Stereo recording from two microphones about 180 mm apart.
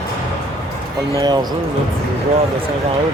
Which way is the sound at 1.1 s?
25° right (ahead or behind).